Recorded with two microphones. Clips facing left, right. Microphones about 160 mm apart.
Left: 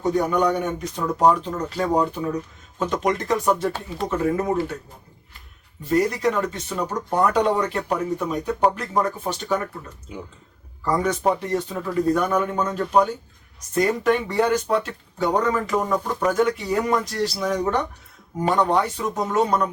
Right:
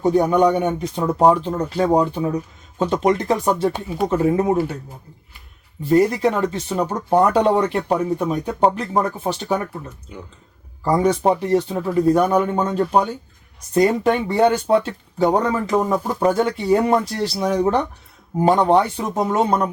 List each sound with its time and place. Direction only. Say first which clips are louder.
0.0 s speech: right 5 dB; 30° right (ahead or behind)
3.7 s speech: right 4 dB; 10° right (ahead or behind)
4.1 s speech: right 4 dB; 30° right (ahead or behind)
5.8 s speech: right 5 dB; 30° right (ahead or behind)
10.1 s speech: left 3 dB; 5° left (ahead or behind)
10.8 s speech: right 4 dB; 30° right (ahead or behind)